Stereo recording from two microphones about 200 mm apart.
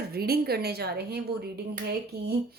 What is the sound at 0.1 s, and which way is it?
Speech, 50° right (ahead or behind).